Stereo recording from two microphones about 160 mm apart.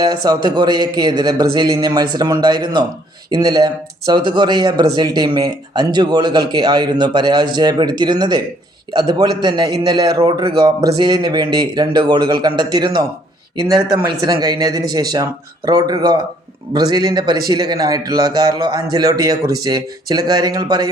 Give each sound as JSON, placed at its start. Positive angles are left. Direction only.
{"t": 0.0, "sound": "speech", "side_deg": -25}